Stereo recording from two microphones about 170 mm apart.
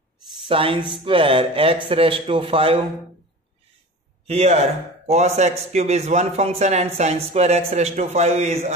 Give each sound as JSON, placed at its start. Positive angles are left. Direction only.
{"t": 0.5, "sound": "speech", "side_deg": -30}
{"t": 4.3, "sound": "speech", "side_deg": -35}